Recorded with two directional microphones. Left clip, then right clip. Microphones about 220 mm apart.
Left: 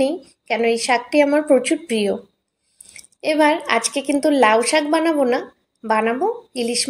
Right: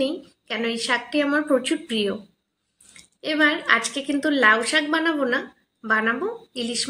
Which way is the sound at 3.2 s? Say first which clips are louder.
Left 4 dB; 20° left (ahead or behind).